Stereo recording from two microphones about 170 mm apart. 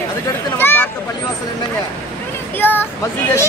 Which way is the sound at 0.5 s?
10° left (ahead or behind).